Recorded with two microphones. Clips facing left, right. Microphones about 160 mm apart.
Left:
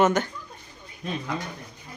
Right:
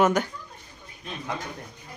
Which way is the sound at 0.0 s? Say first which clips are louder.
Even; 10° right (ahead or behind).